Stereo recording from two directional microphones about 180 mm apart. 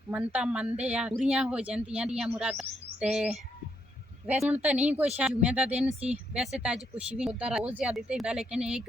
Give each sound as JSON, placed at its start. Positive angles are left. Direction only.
{"t": 0.1, "sound": "a woman's voice", "side_deg": -10}
{"t": 4.3, "sound": "a woman's voice", "side_deg": -10}
{"t": 5.9, "sound": "speech", "side_deg": -35}
{"t": 6.3, "sound": "a woman's voice", "side_deg": -5}